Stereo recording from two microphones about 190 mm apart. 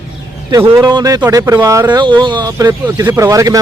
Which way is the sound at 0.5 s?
20° right (ahead or behind).